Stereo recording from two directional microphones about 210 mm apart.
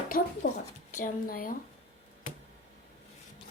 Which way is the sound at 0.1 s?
45° left (ahead or behind).